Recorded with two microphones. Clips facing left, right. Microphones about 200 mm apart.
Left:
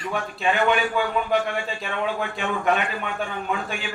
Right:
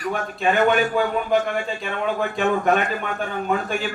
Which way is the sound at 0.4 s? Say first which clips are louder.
Right 3 dB; 40° right (ahead or behind).